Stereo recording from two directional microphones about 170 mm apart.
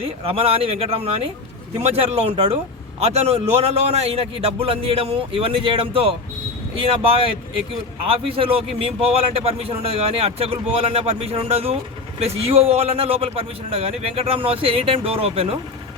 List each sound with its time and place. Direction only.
0.0 s a man's voice: 35° right (ahead or behind)